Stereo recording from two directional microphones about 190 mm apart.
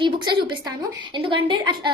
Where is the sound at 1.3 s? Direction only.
25° right (ahead or behind).